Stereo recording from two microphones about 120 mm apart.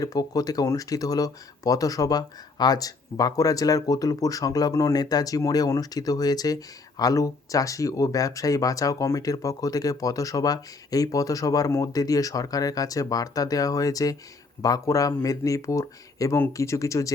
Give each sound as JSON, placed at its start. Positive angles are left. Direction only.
{"t": 0.0, "sound": "speech", "side_deg": 30}